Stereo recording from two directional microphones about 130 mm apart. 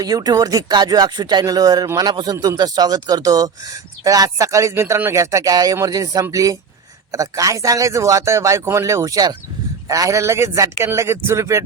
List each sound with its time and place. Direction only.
0.0 s speech: 30° right (ahead or behind)